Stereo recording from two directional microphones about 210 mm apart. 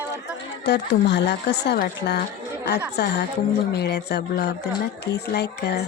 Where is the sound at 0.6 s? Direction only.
55° left (ahead or behind).